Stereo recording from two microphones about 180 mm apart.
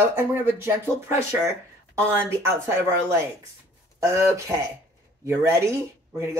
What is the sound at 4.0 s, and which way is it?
Speech, 15° right (ahead or behind).